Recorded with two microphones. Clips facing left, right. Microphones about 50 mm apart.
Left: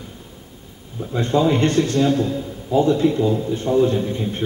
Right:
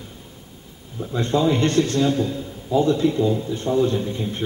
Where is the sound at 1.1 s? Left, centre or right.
Centre.